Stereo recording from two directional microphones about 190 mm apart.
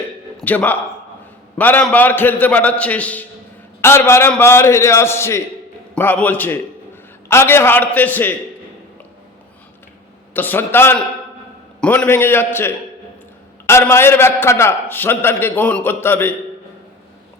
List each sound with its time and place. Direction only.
0.4 s a man's voice: 10° left (ahead or behind)
10.3 s a man's voice: 10° left (ahead or behind)